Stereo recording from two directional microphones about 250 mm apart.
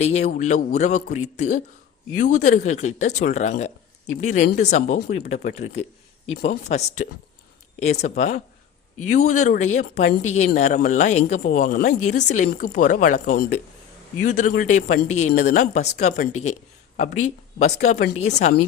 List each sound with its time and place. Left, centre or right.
0.0 s speech: left